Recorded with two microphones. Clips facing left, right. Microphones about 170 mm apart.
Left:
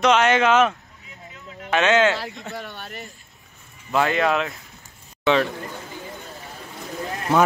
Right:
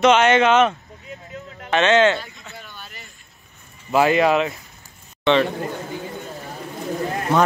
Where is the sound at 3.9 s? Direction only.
5° right (ahead or behind).